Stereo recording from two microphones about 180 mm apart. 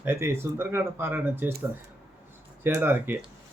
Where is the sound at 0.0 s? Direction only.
10° right (ahead or behind).